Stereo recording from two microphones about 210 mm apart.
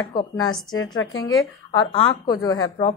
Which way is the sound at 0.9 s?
70° left (ahead or behind).